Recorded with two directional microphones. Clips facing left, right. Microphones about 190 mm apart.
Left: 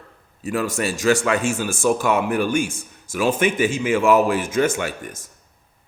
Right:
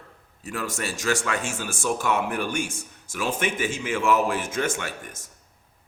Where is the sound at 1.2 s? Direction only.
90° left.